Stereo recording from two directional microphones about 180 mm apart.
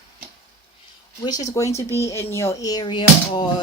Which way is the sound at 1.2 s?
20° left (ahead or behind).